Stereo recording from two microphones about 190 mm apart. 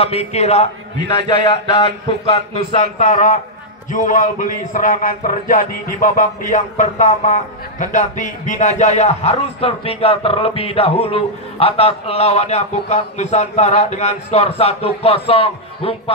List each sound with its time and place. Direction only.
0.0 s a man's voice: 35° left (ahead or behind)
1.0 s a man's voice: 20° left (ahead or behind)